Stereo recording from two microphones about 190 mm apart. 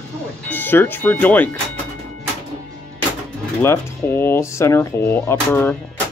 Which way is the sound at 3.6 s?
10° left (ahead or behind).